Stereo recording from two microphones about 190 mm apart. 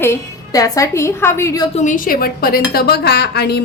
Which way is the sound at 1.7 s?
40° left (ahead or behind).